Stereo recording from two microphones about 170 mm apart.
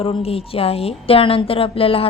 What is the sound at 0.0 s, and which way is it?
A woman's voice, 35° left (ahead or behind).